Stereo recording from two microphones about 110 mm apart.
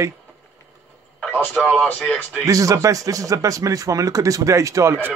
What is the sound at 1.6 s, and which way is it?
Speech, 15° left (ahead or behind).